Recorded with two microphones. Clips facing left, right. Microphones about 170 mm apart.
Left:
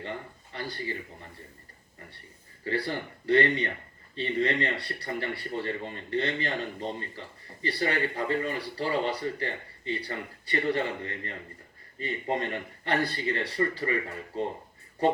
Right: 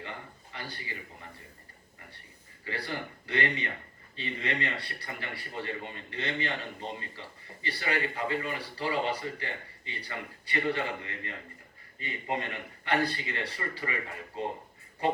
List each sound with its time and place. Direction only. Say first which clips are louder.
0.0 s speech: left 5 dB; 35° left (ahead or behind)
2.6 s speech: left 6 dB; 35° left (ahead or behind)